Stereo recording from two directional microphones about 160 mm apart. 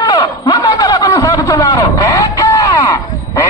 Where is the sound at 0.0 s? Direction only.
25° left (ahead or behind).